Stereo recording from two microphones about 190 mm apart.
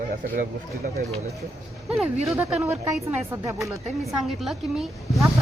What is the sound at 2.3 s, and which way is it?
Speech, 15° right (ahead or behind).